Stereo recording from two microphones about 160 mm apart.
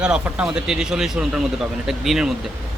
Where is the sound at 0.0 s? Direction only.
5° right (ahead or behind).